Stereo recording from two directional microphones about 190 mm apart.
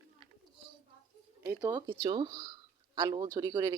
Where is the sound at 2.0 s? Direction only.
20° right (ahead or behind).